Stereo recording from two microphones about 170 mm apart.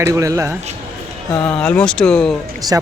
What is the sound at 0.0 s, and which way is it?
Speech, 20° right (ahead or behind).